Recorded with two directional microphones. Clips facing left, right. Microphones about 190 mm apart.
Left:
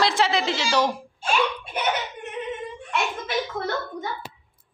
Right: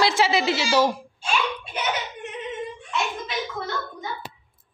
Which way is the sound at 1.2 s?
55° left (ahead or behind).